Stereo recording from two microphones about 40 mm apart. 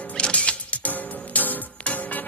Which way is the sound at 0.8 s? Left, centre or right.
Left.